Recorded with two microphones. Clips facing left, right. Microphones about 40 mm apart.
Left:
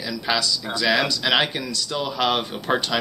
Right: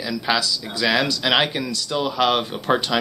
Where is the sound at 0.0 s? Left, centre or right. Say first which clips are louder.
Right 2 dB; centre.